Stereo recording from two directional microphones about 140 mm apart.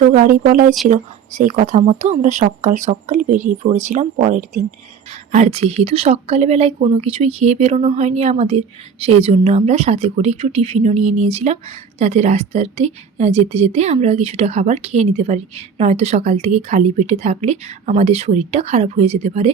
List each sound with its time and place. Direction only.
0.1 s speech: 75° right (ahead or behind)
0.9 s speech: 65° right (ahead or behind)
5.3 s a woman's voice: 50° right (ahead or behind)